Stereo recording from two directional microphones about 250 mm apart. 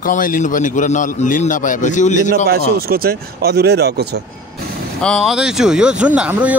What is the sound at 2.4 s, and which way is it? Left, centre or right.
Speech, right.